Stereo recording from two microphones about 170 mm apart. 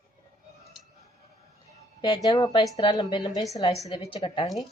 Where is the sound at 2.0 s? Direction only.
30° left (ahead or behind).